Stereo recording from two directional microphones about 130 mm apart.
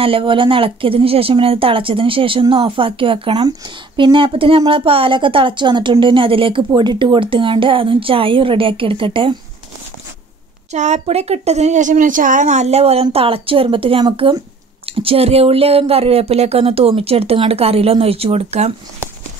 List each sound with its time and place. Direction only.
0.0 s speech: 45° right (ahead or behind)
10.7 s speech: 60° right (ahead or behind)